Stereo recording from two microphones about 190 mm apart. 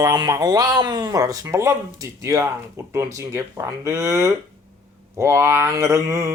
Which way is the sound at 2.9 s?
15° right (ahead or behind).